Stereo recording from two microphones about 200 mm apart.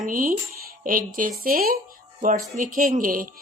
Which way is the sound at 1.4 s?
45° right (ahead or behind).